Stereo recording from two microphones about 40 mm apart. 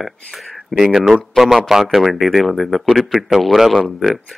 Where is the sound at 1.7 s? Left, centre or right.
Centre.